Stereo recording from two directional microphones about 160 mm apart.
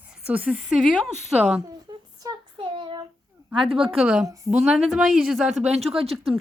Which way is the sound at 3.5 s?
30° right (ahead or behind).